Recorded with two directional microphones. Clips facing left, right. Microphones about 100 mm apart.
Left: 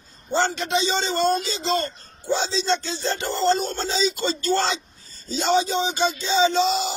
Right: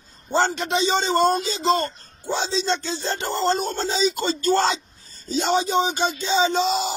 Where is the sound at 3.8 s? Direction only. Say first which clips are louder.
Right 2 dB; 45° right (ahead or behind).